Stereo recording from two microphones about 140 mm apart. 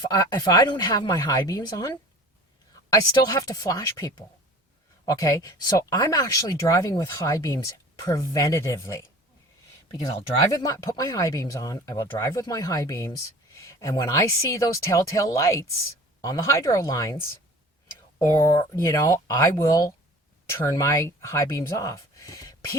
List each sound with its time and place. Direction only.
0.0 s speech: 30° left (ahead or behind)
2.9 s speech: 25° left (ahead or behind)
10.5 s speech: 25° left (ahead or behind)